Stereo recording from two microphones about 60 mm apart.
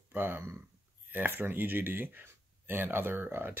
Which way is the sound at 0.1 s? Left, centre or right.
Right.